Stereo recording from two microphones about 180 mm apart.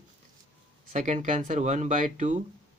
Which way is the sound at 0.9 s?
40° right (ahead or behind).